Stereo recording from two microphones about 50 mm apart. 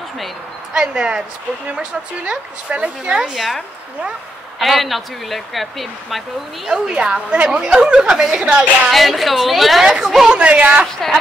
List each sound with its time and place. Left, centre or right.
0.7 s a woman's voice: centre
3.3 s speech: centre
6.7 s a woman's voice: centre
8.9 s speech: centre
10.3 s a woman's voice: right